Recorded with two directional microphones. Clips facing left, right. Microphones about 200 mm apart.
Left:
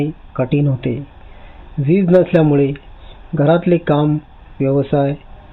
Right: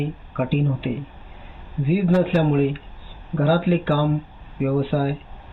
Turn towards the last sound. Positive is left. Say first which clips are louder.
# left 7 dB
turn(degrees=65)  # may be behind; listen again after turning